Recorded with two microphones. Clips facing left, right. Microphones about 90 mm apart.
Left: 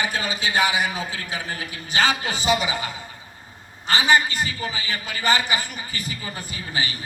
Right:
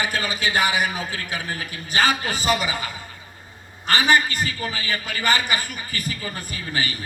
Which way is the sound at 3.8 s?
55° right (ahead or behind).